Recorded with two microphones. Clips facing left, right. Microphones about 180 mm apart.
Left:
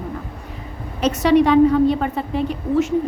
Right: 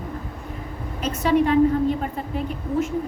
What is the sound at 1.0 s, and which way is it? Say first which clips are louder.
A woman's voice: left 5 dB; 80° left.